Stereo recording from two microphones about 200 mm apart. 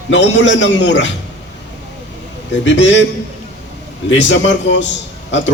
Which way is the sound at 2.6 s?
65° left (ahead or behind).